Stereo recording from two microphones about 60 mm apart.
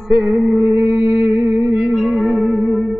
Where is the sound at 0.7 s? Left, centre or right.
Right.